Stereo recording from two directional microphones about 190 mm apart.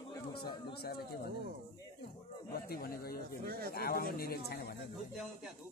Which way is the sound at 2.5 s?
55° left (ahead or behind).